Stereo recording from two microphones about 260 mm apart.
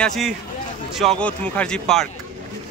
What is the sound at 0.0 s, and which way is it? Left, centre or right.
A man's voice, centre.